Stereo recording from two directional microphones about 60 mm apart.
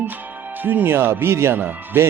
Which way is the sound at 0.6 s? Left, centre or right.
Right.